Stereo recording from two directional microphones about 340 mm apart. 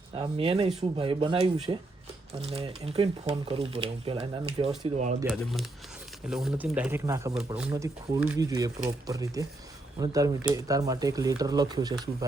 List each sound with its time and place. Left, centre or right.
0.2 s speech: centre
5.3 s speech: centre